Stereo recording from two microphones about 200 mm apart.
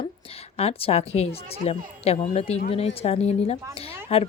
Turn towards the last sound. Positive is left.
turn(degrees=30)  # may be behind; listen again after turning